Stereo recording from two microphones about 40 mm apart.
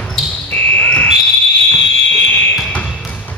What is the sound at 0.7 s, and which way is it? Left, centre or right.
Fire alarm, left.